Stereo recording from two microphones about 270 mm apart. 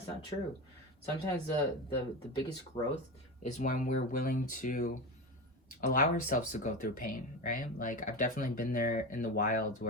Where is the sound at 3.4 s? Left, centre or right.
Left.